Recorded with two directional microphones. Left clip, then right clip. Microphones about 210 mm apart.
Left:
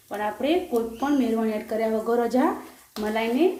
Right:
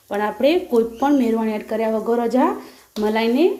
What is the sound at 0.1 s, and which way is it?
Speech, 50° right (ahead or behind).